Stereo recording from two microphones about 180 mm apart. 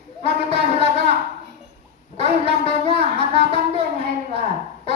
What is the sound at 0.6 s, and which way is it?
Speech, 35° left (ahead or behind).